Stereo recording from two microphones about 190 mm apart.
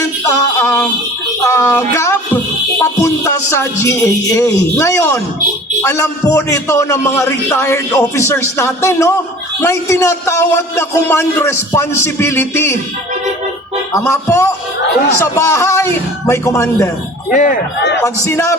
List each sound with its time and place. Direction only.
0.0 s music: 15° left (ahead or behind)
2.8 s a man's voice: 15° left (ahead or behind)
13.9 s a man's voice: 15° left (ahead or behind)
17.3 s speech: 40° left (ahead or behind)
18.0 s a man's voice: 15° left (ahead or behind)